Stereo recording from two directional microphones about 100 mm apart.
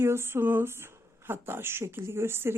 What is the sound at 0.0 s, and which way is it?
Speech, 25° right (ahead or behind).